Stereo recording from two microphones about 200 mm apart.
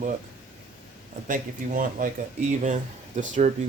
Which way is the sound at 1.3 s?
40° right (ahead or behind).